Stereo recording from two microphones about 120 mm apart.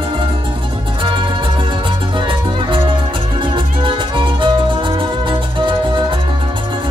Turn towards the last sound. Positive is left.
turn(degrees=-45)  # may be behind; listen again after turning